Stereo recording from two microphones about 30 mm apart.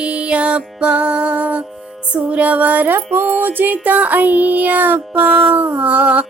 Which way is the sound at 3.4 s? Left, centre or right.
Right.